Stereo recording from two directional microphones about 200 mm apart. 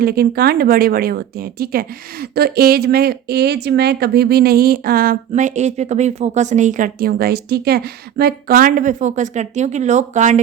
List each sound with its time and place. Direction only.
0.0 s a woman's voice: 50° right (ahead or behind)